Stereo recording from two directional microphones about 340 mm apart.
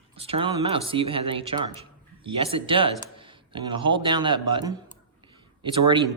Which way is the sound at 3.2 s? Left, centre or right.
Centre.